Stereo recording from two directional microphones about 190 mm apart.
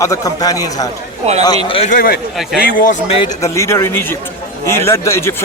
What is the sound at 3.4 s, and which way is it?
A man's voice, 15° left (ahead or behind).